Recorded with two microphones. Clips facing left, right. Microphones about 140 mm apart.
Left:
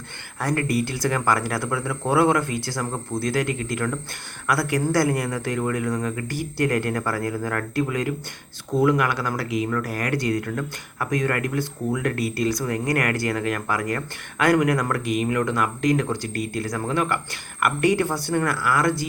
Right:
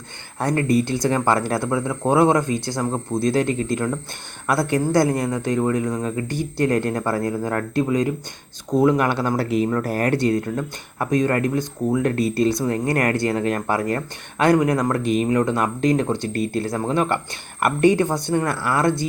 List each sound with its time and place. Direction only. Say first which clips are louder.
0.3 s speech: right 4 dB; 25° right (ahead or behind)